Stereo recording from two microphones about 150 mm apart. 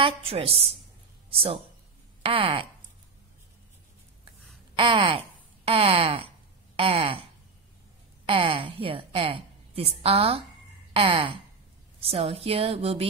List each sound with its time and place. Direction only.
0.0 s a woman's voice: 40° right (ahead or behind)
4.7 s a woman's voice: 35° right (ahead or behind)
8.3 s a woman's voice: 35° right (ahead or behind)
10.9 s a sound: 35° right (ahead or behind)
12.1 s a woman's voice: 40° right (ahead or behind)